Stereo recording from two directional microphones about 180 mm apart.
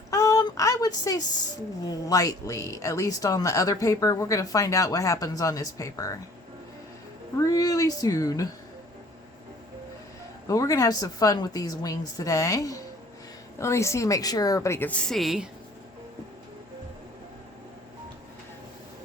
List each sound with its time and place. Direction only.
0.1 s a sound: 20° left (ahead or behind)
1.9 s speech: 20° left (ahead or behind)
7.3 s speech: 20° left (ahead or behind)
10.5 s a woman's voice: 20° left (ahead or behind); by 15.4 s centre (ahead or behind)